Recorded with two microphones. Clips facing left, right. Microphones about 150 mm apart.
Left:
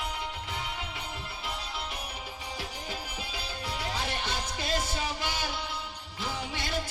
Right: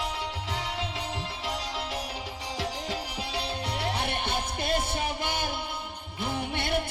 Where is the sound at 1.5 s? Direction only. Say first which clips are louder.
Right 5 dB; 90° right.